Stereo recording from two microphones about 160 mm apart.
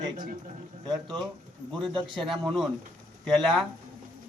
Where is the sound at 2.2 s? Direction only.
Centre (ahead or behind).